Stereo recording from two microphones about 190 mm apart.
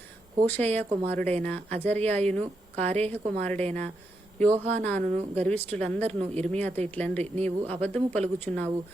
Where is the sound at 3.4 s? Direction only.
5° left (ahead or behind).